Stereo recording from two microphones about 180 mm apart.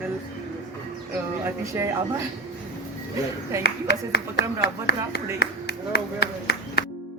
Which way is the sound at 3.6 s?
65° left (ahead or behind).